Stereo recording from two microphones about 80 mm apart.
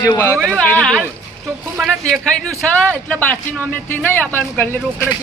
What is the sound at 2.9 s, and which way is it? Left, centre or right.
Speech, centre.